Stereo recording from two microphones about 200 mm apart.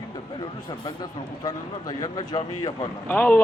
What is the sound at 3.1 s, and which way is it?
Speech, 10° left (ahead or behind).